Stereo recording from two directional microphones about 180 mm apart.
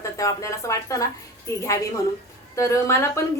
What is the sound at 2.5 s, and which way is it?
Speech, 15° left (ahead or behind).